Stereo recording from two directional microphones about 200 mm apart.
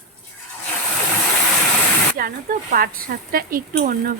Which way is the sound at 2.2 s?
45° right (ahead or behind).